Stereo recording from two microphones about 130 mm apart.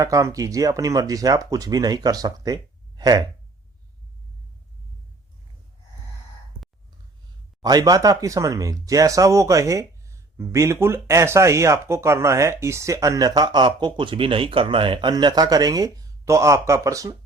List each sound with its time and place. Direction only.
0.0 s speech: 25° right (ahead or behind)
7.6 s speech: 30° right (ahead or behind)